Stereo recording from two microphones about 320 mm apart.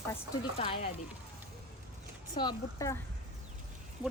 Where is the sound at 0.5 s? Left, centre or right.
Centre.